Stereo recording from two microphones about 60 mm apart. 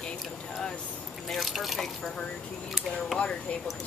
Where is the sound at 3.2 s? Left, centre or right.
Centre.